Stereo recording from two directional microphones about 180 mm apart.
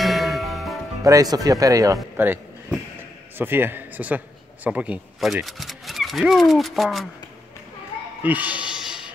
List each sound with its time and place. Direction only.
0.0 s music: centre (ahead or behind)
1.0 s a man's voice: 20° right (ahead or behind); by 7.1 s centre (ahead or behind)
8.2 s music: 10° right (ahead or behind)